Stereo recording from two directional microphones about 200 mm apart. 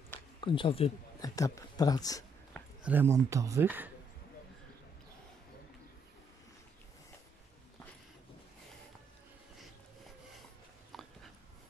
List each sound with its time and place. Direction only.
0.4 s speech: 25° left (ahead or behind)
1.3 s speech: 15° left (ahead or behind)
2.5 s speech: 5° right (ahead or behind)